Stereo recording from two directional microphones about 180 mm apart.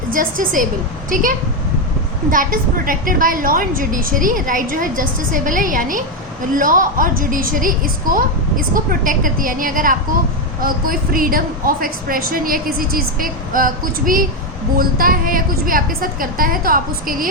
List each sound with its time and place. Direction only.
0.1 s a woman's voice: 50° right (ahead or behind)